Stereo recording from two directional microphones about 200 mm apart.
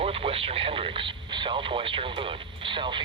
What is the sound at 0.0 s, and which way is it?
Radio, 30° right (ahead or behind).